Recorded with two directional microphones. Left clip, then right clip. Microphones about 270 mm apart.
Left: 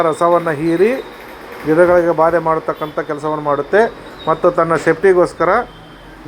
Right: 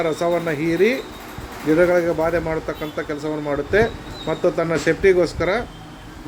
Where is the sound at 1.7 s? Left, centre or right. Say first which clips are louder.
Left 6 dB; centre.